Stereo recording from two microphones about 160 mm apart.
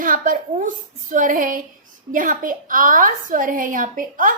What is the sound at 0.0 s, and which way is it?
A woman's voice, 55° right (ahead or behind).